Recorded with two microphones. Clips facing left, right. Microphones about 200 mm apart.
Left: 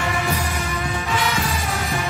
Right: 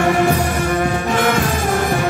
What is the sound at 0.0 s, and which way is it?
Music, 55° right (ahead or behind).